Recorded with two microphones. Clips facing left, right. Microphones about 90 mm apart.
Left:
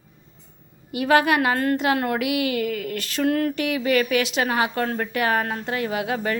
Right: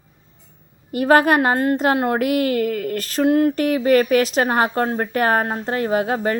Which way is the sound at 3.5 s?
40° right (ahead or behind).